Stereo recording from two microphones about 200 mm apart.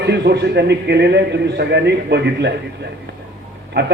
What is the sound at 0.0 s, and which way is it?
A man's voice, 55° right (ahead or behind).